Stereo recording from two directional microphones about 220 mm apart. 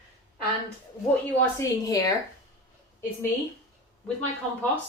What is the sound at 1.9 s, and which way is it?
Speech, 15° left (ahead or behind).